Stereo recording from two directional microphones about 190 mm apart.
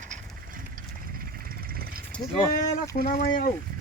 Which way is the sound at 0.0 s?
40° right (ahead or behind).